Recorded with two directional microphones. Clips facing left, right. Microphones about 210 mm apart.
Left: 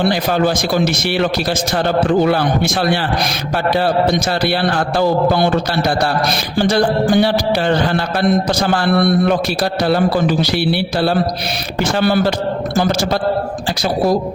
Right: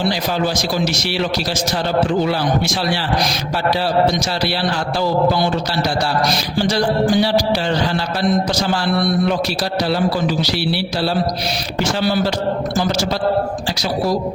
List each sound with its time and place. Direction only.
0.0 s a man's voice: 55° left (ahead or behind)
4.0 s a man's voice: 55° left (ahead or behind)